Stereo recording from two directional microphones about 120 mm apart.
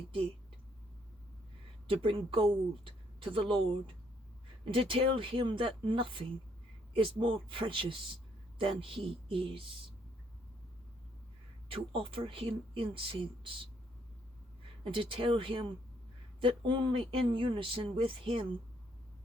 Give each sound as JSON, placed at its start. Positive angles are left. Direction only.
{"t": 1.9, "sound": "speech", "side_deg": -50}
{"t": 4.7, "sound": "speech", "side_deg": -50}
{"t": 11.7, "sound": "speech", "side_deg": -50}
{"t": 14.8, "sound": "speech", "side_deg": -45}